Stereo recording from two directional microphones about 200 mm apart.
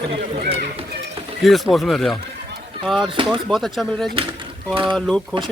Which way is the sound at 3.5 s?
Centre (ahead or behind).